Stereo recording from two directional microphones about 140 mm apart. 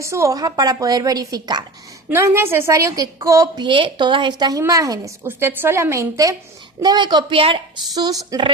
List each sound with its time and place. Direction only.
0.0 s a woman's voice: 20° right (ahead or behind); by 7.6 s 40° right (ahead or behind)
7.9 s a woman's voice: 30° right (ahead or behind)